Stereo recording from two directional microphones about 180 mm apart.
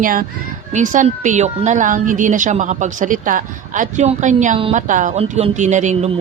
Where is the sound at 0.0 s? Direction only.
50° right (ahead or behind).